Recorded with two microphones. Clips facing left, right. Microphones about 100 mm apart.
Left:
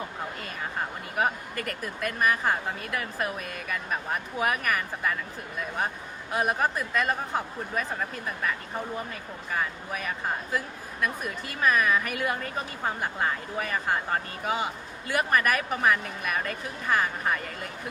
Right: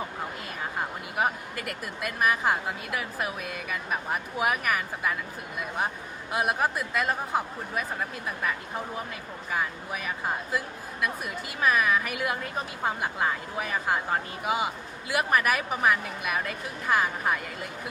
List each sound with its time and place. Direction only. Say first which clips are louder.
1.1 s a woman's voice: left 1 dB; 5° right (ahead or behind)